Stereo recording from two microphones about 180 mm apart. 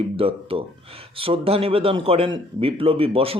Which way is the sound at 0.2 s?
30° right (ahead or behind).